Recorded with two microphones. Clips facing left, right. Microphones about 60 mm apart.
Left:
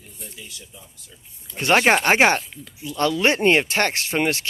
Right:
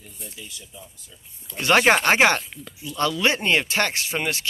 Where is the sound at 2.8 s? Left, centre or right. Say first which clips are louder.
Left 2 dB; left.